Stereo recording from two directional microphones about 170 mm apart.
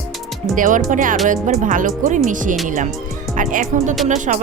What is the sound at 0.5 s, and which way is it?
Speech, 50° right (ahead or behind).